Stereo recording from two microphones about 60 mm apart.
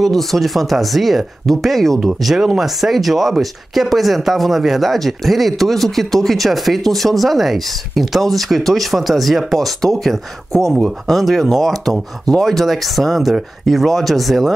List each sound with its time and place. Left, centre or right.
0.0 s speech: centre